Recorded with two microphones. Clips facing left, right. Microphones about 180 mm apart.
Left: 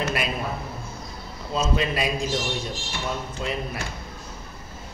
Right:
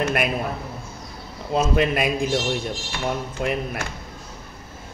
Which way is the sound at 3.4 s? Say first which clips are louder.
Right 6 dB; 60° right (ahead or behind).